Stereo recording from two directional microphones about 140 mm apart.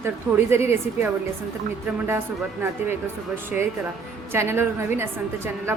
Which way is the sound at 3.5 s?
10° right (ahead or behind).